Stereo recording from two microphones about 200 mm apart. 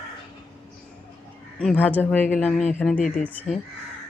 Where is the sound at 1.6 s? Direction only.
5° left (ahead or behind).